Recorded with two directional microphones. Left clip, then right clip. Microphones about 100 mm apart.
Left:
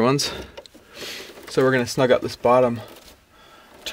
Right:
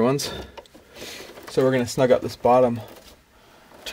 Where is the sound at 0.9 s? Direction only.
25° left (ahead or behind).